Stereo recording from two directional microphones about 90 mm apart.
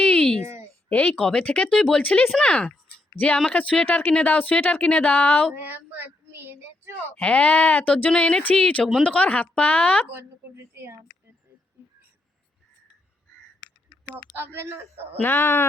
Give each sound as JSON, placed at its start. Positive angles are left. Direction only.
{"t": 0.0, "sound": "a sound", "side_deg": 10}
{"t": 0.9, "sound": "speech", "side_deg": 15}
{"t": 5.5, "sound": "child singing", "side_deg": -20}
{"t": 7.2, "sound": "speech", "side_deg": 15}
{"t": 10.2, "sound": "speech", "side_deg": -25}
{"t": 14.3, "sound": "speech", "side_deg": -25}
{"t": 15.2, "sound": "speech", "side_deg": 25}